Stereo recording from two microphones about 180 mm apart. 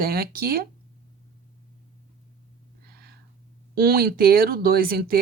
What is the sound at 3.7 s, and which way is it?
Speech, 55° right (ahead or behind).